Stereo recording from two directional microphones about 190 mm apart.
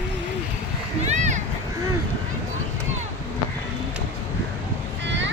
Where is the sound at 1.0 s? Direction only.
40° right (ahead or behind).